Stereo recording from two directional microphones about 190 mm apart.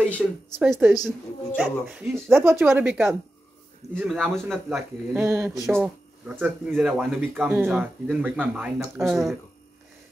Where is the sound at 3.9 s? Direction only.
Centre (ahead or behind).